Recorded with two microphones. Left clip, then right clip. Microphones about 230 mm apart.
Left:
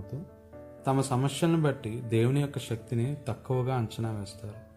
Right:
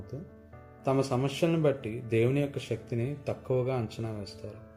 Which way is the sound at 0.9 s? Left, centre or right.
Left.